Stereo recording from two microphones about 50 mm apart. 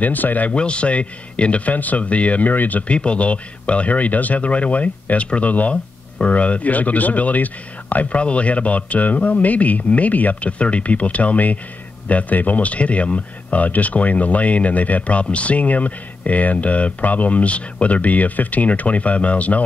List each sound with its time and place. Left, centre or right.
0.0 s speech: left
0.5 s speech: left
2.9 s speech: left